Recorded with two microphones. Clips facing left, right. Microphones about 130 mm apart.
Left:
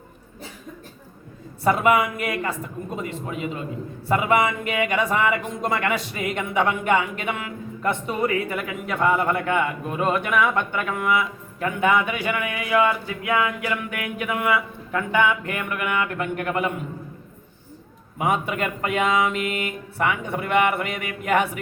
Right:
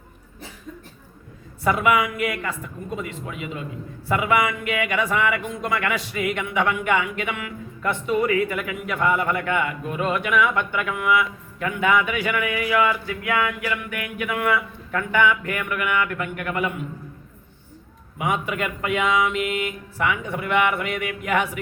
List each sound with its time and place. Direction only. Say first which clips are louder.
1.6 s speech: left 1 dB; 30° left (ahead or behind)
18.2 s speech: left 1 dB; 35° left (ahead or behind)